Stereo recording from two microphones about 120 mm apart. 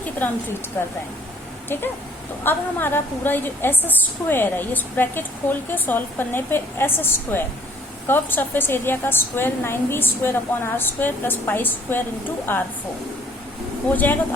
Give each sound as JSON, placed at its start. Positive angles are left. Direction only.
{"t": 0.2, "sound": "a woman's voice", "side_deg": 15}
{"t": 2.4, "sound": "a woman's voice", "side_deg": 15}
{"t": 13.9, "sound": "a woman's voice", "side_deg": 15}